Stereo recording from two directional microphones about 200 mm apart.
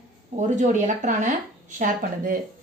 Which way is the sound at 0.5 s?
40° right (ahead or behind).